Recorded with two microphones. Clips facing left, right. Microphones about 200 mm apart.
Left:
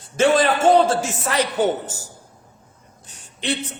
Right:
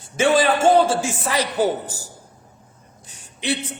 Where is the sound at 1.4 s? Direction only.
35° right (ahead or behind).